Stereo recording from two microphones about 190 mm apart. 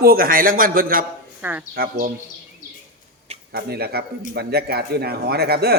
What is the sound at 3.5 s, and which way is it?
Speech, 55° right (ahead or behind).